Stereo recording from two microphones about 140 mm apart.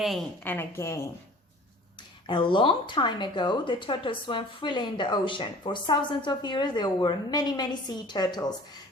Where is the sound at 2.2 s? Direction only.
35° left (ahead or behind).